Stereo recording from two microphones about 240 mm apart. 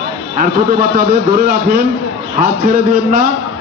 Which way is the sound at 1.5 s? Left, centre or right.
Right.